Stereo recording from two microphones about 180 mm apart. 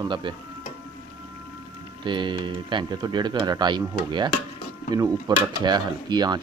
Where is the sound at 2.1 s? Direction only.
25° right (ahead or behind).